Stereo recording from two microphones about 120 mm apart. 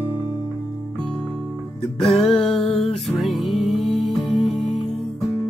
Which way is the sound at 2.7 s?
60° left (ahead or behind).